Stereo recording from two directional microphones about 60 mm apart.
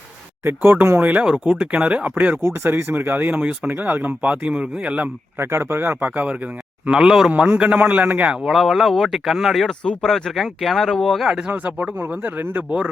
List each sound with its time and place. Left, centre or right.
0.4 s speech: right
2.4 s speech: right
3.1 s speech: right
3.7 s speech: right
4.2 s speech: right
5.4 s speech: right
6.0 s a man's voice: right
8.4 s speech: centre
9.8 s speech: centre
10.1 s speech: centre
11.3 s a man's voice: centre
11.5 s speech: right